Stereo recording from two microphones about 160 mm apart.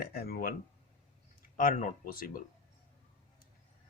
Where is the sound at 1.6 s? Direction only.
60° left (ahead or behind).